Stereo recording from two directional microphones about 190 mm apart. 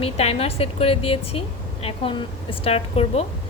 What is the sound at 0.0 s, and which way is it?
A woman's voice, 30° left (ahead or behind).